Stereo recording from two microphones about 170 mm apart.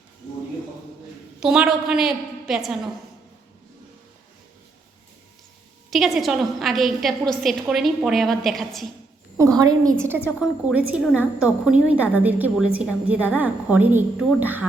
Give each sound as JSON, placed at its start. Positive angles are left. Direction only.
{"t": 1.4, "sound": "a woman's voice", "side_deg": -5}
{"t": 5.9, "sound": "a woman's voice", "side_deg": 0}
{"t": 9.4, "sound": "a woman's voice", "side_deg": -20}